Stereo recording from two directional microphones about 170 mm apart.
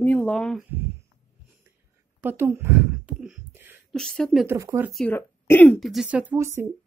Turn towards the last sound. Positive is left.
turn(degrees=-15)  # may be behind; listen again after turning